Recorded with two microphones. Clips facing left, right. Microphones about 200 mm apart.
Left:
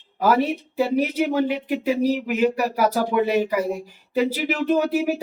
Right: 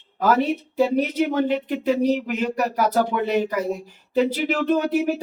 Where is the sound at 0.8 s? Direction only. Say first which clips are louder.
Right 1 dB; 10° left (ahead or behind).